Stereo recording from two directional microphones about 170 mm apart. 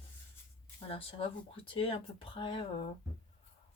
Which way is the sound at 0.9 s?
35° left (ahead or behind).